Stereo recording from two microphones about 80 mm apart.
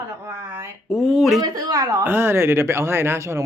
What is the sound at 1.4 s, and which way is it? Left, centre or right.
Speech, right.